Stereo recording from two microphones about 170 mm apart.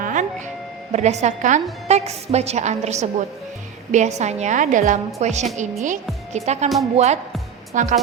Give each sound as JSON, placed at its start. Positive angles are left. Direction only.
{"t": 0.0, "sound": "music", "side_deg": -50}
{"t": 0.9, "sound": "a woman's voice", "side_deg": -40}